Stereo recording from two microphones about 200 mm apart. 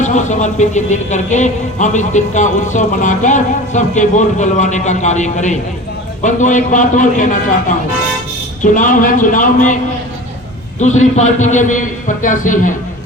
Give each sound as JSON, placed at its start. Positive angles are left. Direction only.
{"t": 0.0, "sound": "speech", "side_deg": 35}
{"t": 8.7, "sound": "speech", "side_deg": 40}
{"t": 10.8, "sound": "speech", "side_deg": 35}